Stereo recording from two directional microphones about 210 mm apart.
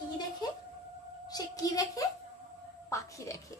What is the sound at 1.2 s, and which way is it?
A woman's voice, 20° left (ahead or behind).